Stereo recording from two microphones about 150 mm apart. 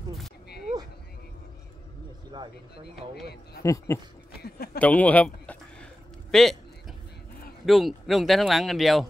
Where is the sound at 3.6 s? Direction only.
20° left (ahead or behind); by 6.5 s 5° left (ahead or behind).